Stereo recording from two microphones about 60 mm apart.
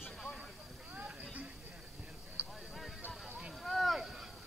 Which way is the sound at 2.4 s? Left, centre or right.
Right.